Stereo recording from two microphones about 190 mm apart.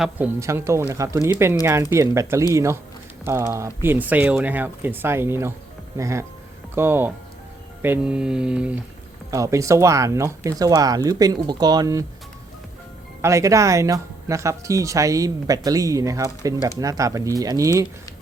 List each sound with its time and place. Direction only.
0.0 s speech: 10° right (ahead or behind)
9.3 s speech: 15° right (ahead or behind)
13.2 s speech: 15° right (ahead or behind)